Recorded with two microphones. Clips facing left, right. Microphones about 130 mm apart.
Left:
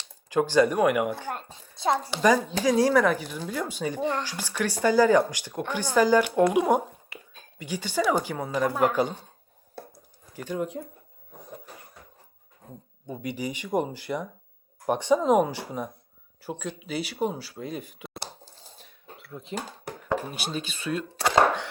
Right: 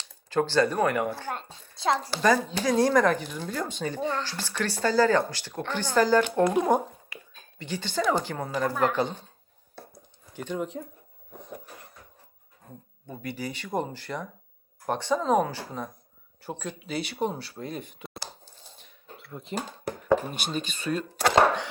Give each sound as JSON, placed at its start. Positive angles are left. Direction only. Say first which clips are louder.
{"t": 0.3, "sound": "speech", "louder": "left 2 dB", "side_deg": 15}
{"t": 10.3, "sound": "speech", "louder": "left 1 dB", "side_deg": 5}
{"t": 13.1, "sound": "speech", "louder": "left 3 dB", "side_deg": 15}
{"t": 16.4, "sound": "speech", "louder": "left 1 dB", "side_deg": 5}
{"t": 18.8, "sound": "a sound", "louder": "right 1 dB", "side_deg": 0}
{"t": 20.3, "sound": "speech", "louder": "right 1 dB", "side_deg": 5}